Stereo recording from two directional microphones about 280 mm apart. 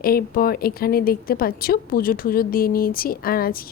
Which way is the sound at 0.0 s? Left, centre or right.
Left.